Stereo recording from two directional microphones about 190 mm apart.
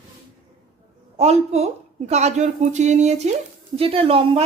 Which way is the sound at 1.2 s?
35° right (ahead or behind).